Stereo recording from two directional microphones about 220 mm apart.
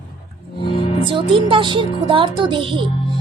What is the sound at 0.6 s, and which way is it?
Music, 25° left (ahead or behind).